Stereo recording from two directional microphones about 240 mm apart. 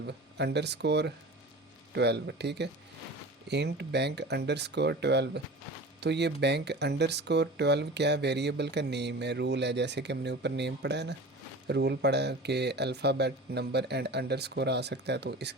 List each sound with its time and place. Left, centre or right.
0.0 s speech: right